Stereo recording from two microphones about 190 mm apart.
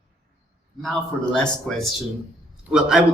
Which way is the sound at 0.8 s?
5° left (ahead or behind).